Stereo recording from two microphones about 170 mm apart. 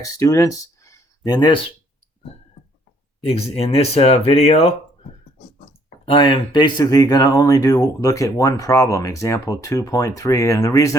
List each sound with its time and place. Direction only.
0.0 s speech: 20° left (ahead or behind)
3.2 s speech: 35° left (ahead or behind)
6.1 s speech: 30° left (ahead or behind)